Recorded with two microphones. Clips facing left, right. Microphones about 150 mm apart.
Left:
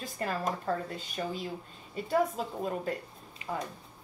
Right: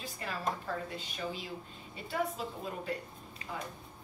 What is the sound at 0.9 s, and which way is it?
A woman's voice, 45° left (ahead or behind).